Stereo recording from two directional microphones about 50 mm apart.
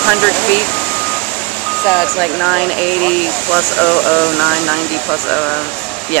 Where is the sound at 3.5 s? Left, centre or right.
Left.